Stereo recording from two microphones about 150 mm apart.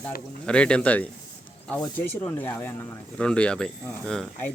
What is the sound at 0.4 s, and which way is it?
Speech, 5° left (ahead or behind).